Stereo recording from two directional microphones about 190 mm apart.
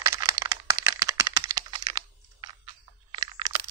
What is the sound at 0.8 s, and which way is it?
Crack, 15° right (ahead or behind).